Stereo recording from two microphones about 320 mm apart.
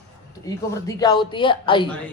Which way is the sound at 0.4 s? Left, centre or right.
Centre.